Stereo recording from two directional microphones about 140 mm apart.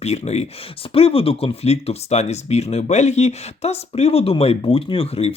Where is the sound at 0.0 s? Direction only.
50° left (ahead or behind).